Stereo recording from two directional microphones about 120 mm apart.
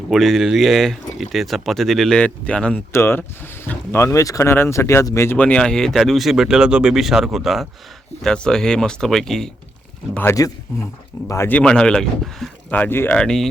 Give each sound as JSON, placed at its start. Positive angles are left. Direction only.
{"t": 0.1, "sound": "speech", "side_deg": 0}
{"t": 2.9, "sound": "speech", "side_deg": 20}
{"t": 10.4, "sound": "speech", "side_deg": 30}
{"t": 11.5, "sound": "speech", "side_deg": 5}
{"t": 12.7, "sound": "speech", "side_deg": 15}
{"t": 13.1, "sound": "speech", "side_deg": 5}